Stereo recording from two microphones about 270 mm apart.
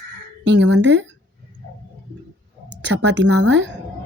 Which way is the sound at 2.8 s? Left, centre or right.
Right.